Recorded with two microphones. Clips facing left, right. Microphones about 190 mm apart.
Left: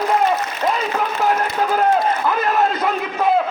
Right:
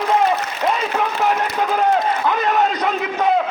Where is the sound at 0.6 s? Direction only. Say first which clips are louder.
Right 1 dB; 5° right (ahead or behind).